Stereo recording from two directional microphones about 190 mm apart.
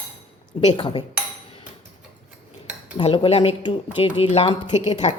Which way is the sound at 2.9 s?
30° left (ahead or behind).